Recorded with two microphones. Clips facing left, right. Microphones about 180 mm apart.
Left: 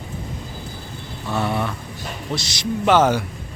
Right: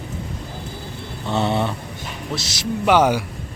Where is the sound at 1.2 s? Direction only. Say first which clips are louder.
Right 2 dB; 25° right (ahead or behind).